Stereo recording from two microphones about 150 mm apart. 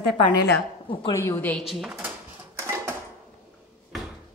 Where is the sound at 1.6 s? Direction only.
Centre (ahead or behind).